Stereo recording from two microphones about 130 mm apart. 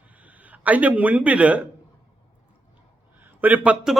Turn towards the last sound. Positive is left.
turn(degrees=-10)  # may be behind; listen again after turning